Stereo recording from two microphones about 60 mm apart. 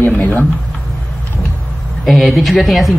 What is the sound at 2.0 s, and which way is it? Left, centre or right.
Speech, centre.